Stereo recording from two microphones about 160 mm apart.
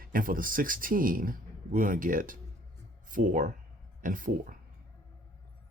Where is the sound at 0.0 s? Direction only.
60° right (ahead or behind).